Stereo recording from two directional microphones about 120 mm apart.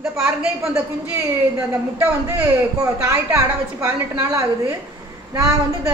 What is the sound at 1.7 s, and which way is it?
Speech, 15° right (ahead or behind).